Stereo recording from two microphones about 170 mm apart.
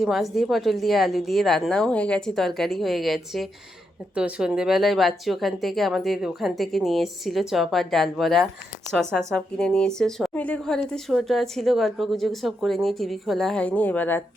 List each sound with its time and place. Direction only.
0.0 s a woman's voice: centre (ahead or behind)